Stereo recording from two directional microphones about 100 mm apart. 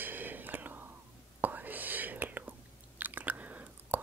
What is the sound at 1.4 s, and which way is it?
Whispering, 15° right (ahead or behind).